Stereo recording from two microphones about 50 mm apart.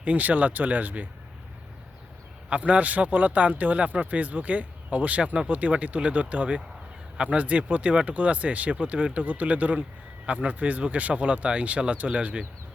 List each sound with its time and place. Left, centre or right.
0.0 s speech: right
2.5 s speech: right